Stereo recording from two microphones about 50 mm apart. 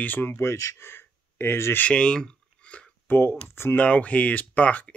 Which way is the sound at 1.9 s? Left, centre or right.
Centre.